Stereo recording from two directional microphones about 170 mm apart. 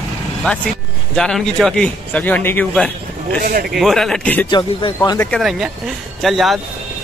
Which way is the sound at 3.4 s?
60° right (ahead or behind).